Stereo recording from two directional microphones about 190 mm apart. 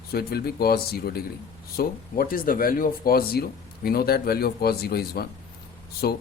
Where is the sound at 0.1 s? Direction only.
55° left (ahead or behind).